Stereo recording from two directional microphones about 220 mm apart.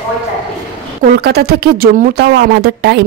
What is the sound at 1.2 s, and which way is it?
Speech, 45° right (ahead or behind).